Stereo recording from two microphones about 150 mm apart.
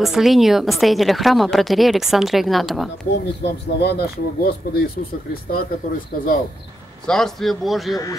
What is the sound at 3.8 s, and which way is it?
Speech, 90° left.